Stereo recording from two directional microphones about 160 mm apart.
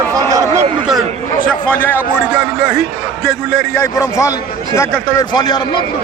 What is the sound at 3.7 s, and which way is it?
Speech, 20° left (ahead or behind).